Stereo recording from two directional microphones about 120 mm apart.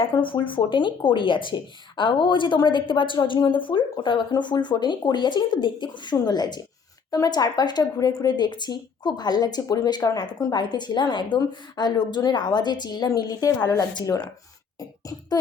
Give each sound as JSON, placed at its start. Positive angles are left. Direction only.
{"t": 0.1, "sound": "speech", "side_deg": 45}
{"t": 14.8, "sound": "music", "side_deg": 30}